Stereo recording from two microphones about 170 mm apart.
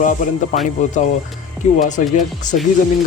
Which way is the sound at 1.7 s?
50° left (ahead or behind).